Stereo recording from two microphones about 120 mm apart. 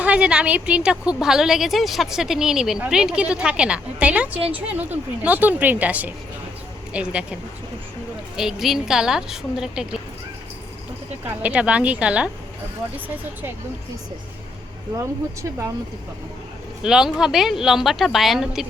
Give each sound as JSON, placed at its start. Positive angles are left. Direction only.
{"t": 0.0, "sound": "a woman's voice", "side_deg": -10}
{"t": 8.4, "sound": "a woman's voice", "side_deg": -5}
{"t": 11.3, "sound": "a woman's voice", "side_deg": -10}
{"t": 14.9, "sound": "speech", "side_deg": -25}
{"t": 16.8, "sound": "a woman's voice", "side_deg": -5}